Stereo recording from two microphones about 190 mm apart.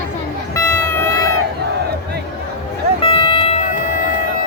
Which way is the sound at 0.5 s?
15° left (ahead or behind).